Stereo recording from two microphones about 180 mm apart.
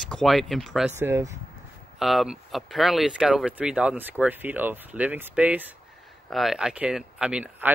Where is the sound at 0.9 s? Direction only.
15° right (ahead or behind).